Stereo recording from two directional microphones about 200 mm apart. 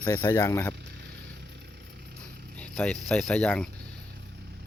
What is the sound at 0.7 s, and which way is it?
Vehicle, 55° right (ahead or behind).